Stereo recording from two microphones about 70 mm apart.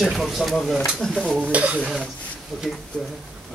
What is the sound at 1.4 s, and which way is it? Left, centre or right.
Speech, right.